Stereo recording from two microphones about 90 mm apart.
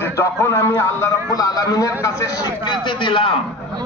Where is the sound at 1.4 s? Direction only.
45° left (ahead or behind).